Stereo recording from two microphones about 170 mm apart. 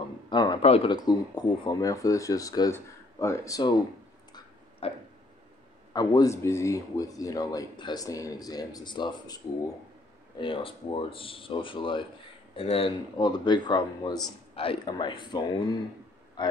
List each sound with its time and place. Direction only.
0.3 s a man's voice: 25° left (ahead or behind)
0.9 s speech: 25° left (ahead or behind)
4.3 s a sound: 30° left (ahead or behind)
5.9 s speech: 20° left (ahead or behind)
10.4 s speech: 30° left (ahead or behind)